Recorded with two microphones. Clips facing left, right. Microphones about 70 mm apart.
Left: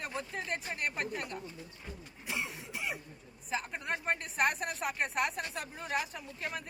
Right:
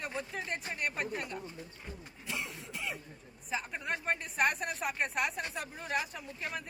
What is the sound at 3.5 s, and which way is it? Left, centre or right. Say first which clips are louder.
A man's voice: even; centre.